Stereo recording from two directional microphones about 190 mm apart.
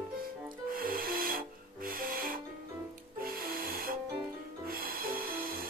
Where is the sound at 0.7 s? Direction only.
50° right (ahead or behind).